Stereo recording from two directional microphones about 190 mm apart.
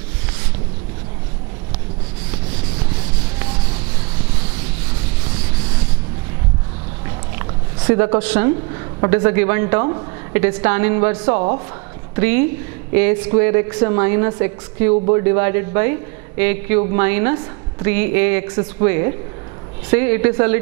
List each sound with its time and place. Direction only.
8.2 s a woman's voice: 10° right (ahead or behind)